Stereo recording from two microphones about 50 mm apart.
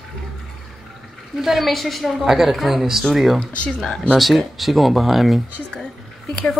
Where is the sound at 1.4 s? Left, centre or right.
Centre.